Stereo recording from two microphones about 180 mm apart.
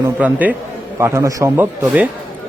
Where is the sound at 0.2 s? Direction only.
10° right (ahead or behind).